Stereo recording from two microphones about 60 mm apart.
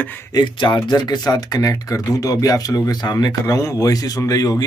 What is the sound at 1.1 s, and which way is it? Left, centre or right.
Speech, left.